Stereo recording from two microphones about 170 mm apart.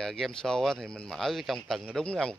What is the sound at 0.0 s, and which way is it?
Speech, 5° left (ahead or behind).